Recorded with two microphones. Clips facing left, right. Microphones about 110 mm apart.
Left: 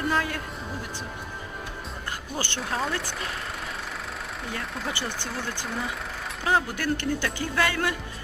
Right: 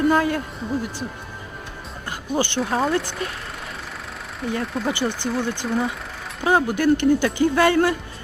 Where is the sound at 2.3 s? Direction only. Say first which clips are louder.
Right 11 dB; 15° right (ahead or behind).